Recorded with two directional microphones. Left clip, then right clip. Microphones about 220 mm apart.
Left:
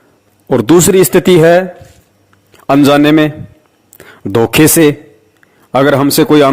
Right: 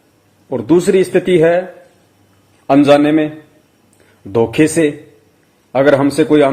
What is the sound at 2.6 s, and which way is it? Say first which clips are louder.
A man's voice: left 2 dB; 50° left (ahead or behind).